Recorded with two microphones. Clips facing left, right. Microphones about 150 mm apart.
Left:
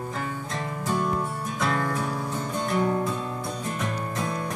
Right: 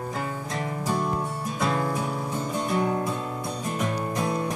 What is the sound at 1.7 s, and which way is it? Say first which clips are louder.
Music: right 1 dB; 20° right (ahead or behind).